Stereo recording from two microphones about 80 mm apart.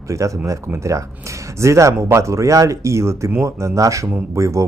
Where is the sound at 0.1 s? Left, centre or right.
Right.